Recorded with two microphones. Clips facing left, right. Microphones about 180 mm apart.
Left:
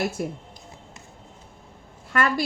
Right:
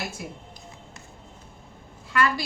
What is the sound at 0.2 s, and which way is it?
Speech, 50° left (ahead or behind).